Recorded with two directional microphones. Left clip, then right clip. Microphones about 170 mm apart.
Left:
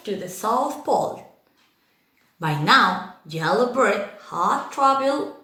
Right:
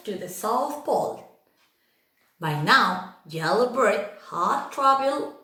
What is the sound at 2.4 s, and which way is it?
Speech, 20° left (ahead or behind).